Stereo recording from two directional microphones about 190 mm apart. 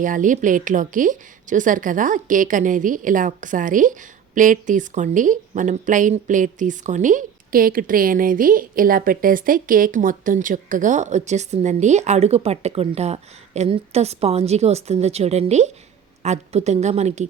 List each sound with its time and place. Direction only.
0.0 s a woman's voice: 45° right (ahead or behind)